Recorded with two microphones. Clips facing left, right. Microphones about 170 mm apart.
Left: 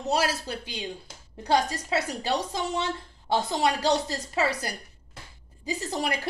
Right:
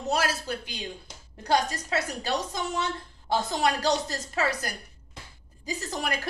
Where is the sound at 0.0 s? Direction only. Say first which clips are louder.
Left 1 dB; 35° left (ahead or behind).